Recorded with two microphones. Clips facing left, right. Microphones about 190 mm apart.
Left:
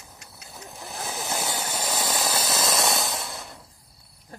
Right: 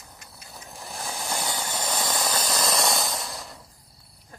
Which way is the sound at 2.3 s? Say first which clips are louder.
Even; 25° left (ahead or behind).